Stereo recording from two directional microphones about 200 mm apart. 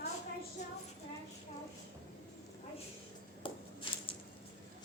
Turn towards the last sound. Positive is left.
turn(degrees=25)  # may be behind; listen again after turning